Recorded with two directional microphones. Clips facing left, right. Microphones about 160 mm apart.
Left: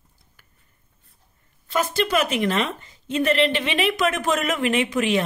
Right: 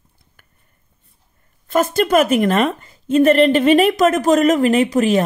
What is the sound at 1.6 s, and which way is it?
A woman's voice, 50° right (ahead or behind).